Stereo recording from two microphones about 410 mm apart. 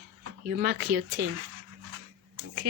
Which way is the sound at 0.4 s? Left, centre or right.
Right.